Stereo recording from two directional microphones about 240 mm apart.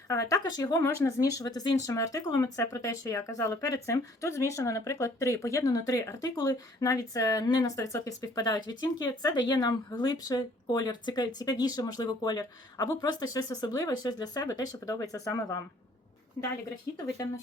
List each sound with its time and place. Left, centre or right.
0.1 s speech: centre